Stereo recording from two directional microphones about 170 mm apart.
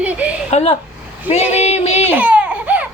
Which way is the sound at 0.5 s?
35° left (ahead or behind).